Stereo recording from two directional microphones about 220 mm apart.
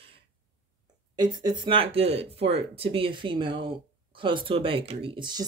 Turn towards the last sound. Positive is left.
turn(degrees=-20)  # may be behind; listen again after turning